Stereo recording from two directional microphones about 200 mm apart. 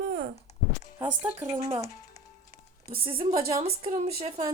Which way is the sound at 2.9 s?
25° right (ahead or behind).